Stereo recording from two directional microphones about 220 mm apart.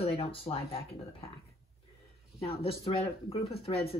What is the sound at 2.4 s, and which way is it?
Speech, 25° left (ahead or behind).